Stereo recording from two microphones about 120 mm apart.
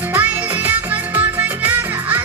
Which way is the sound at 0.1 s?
15° right (ahead or behind).